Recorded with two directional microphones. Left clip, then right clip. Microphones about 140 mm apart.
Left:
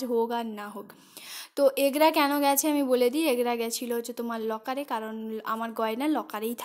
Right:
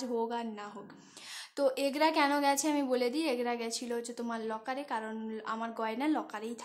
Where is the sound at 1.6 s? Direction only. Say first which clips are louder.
Left 7 dB; 45° left (ahead or behind).